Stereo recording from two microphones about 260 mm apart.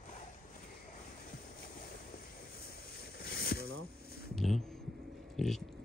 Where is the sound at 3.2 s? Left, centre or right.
Left.